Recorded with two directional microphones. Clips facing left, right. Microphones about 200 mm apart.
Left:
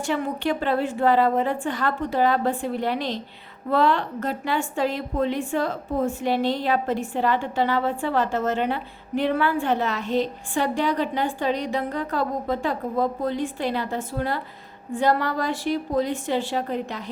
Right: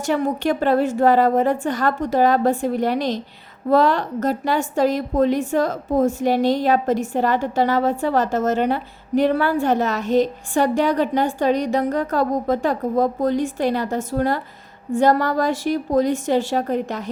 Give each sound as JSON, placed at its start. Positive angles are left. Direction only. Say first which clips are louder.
{"t": 0.0, "sound": "a woman's voice", "louder": "right 5 dB", "side_deg": -45}